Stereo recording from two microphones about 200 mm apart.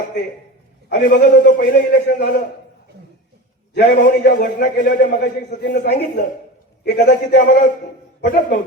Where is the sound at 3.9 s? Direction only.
45° left (ahead or behind).